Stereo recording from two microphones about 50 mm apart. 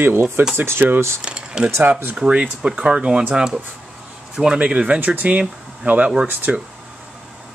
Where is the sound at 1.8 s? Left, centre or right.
Right.